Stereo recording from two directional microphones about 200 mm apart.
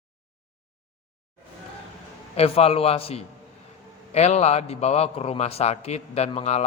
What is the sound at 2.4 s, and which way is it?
A man's voice, 30° left (ahead or behind).